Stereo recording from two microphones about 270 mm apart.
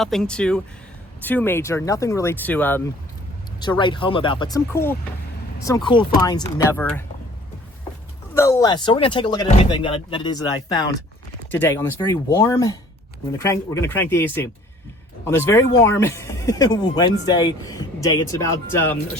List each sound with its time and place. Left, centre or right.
0.0 s speech: centre
8.4 s speech: centre